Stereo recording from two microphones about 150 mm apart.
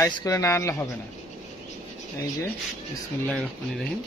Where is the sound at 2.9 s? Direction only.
5° left (ahead or behind).